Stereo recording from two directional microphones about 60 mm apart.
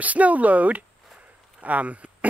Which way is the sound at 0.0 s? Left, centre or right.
Right.